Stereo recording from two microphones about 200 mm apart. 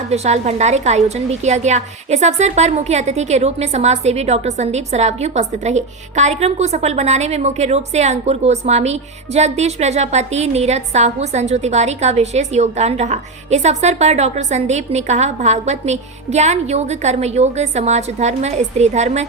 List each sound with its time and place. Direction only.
0.1 s a woman's voice: 35° right (ahead or behind)